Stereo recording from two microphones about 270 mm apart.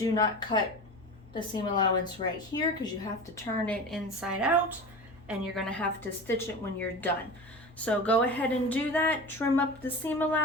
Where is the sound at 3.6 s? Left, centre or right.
Centre.